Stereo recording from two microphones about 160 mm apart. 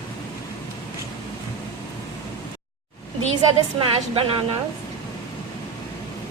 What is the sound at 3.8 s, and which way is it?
Speech, 35° right (ahead or behind).